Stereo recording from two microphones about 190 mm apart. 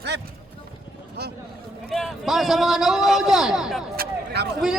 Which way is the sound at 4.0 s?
60° right (ahead or behind).